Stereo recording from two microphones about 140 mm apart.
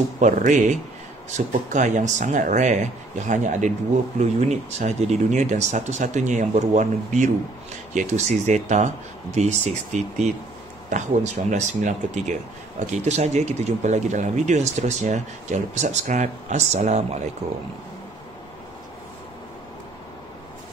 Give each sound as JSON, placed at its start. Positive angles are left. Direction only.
{"t": 0.2, "sound": "speech", "side_deg": -65}
{"t": 11.5, "sound": "speech", "side_deg": -60}